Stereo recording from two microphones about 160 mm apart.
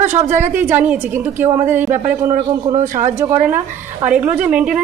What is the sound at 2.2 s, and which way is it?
Speech, 55° right (ahead or behind).